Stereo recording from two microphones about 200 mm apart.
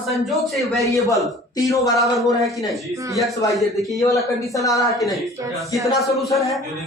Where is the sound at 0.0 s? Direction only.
Centre (ahead or behind).